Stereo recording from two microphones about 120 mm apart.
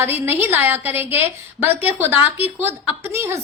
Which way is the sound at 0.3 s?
20° right (ahead or behind).